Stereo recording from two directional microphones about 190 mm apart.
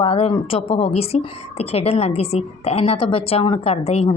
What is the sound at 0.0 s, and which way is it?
A woman's voice, 30° left (ahead or behind).